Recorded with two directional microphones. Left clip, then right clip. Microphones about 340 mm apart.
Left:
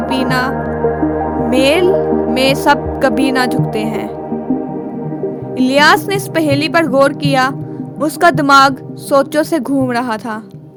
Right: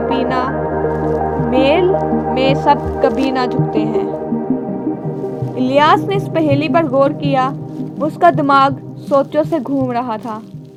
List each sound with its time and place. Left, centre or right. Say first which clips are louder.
0.1 s music: left 3 dB; left
1.5 s speech: left 1 dB; left
5.5 s speech: left 2 dB; left